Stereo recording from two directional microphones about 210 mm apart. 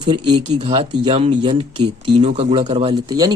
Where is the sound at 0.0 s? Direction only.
20° right (ahead or behind).